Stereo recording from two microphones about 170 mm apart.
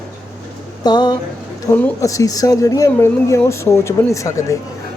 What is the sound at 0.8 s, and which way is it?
A woman's voice, 25° left (ahead or behind).